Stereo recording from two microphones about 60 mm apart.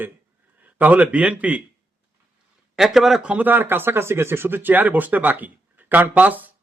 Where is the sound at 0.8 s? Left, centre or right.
Right.